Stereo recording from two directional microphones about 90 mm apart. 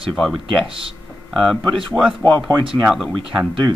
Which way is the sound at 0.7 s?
80° right.